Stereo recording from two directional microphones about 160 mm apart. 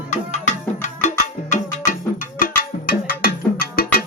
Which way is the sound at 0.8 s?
45° left (ahead or behind).